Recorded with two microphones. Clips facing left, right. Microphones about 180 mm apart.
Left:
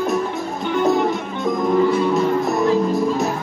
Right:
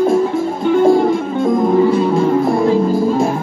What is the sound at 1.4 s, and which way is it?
Music, 25° right (ahead or behind).